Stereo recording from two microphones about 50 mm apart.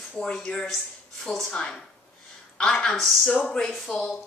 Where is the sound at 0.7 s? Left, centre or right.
Centre.